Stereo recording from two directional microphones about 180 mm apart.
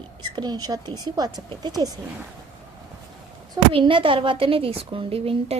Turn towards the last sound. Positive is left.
turn(degrees=-30)  # may be behind; listen again after turning